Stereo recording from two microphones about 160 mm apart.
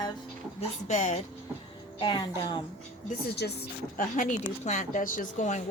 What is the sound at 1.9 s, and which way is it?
Speech, 30° left (ahead or behind).